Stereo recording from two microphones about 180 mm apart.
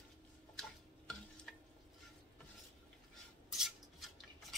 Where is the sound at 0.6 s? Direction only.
5° left (ahead or behind).